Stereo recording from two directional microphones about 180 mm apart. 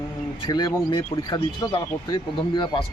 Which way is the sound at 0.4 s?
25° left (ahead or behind).